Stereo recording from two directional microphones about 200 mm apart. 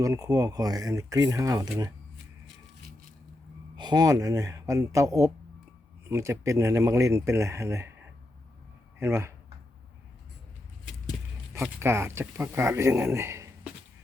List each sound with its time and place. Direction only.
0.0 s speech: 15° right (ahead or behind)
3.8 s speech: 20° right (ahead or behind)
9.0 s speech: 10° right (ahead or behind)
11.5 s speech: 10° right (ahead or behind)